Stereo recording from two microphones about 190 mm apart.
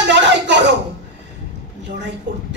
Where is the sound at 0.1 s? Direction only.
65° right (ahead or behind).